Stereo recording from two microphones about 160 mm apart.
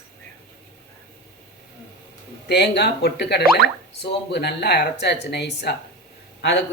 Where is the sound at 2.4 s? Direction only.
90° left.